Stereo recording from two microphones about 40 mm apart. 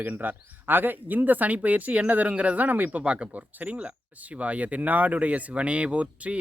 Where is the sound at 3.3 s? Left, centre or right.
Right.